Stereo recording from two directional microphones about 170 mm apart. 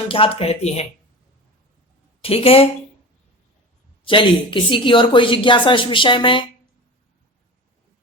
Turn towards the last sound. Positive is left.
turn(degrees=30)  # may be behind; listen again after turning